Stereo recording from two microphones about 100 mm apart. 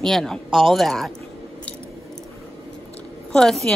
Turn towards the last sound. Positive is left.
turn(degrees=5)  # may be behind; listen again after turning